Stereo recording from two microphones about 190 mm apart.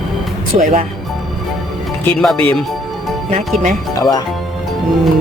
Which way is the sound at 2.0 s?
5° left (ahead or behind).